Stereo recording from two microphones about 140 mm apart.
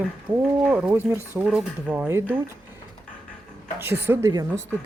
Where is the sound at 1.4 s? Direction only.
5° right (ahead or behind).